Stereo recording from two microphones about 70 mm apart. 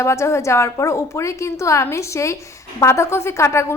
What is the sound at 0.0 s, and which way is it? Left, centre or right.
A woman's voice, left.